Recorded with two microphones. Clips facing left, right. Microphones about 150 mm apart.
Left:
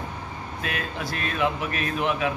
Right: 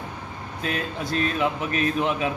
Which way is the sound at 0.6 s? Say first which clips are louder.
Right 3 dB; 25° right (ahead or behind).